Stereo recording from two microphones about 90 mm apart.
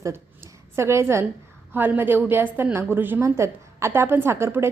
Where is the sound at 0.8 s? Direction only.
30° right (ahead or behind).